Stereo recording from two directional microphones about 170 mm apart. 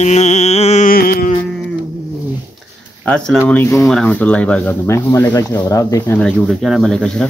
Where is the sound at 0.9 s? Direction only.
55° left (ahead or behind).